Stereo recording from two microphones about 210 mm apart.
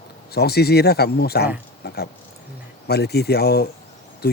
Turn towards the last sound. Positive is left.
turn(degrees=50)  # may be behind; listen again after turning